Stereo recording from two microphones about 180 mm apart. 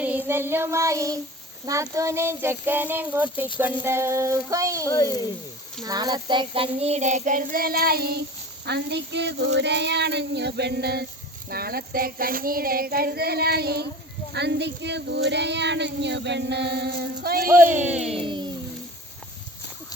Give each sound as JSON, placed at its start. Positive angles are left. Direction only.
{"t": 0.0, "sound": "child singing", "side_deg": -10}
{"t": 1.6, "sound": "speech", "side_deg": -15}
{"t": 4.9, "sound": "speech", "side_deg": 20}
{"t": 5.8, "sound": "child singing", "side_deg": -20}
{"t": 17.2, "sound": "child singing", "side_deg": -55}
{"t": 17.7, "sound": "child singing", "side_deg": -40}
{"t": 18.0, "sound": "speech", "side_deg": -30}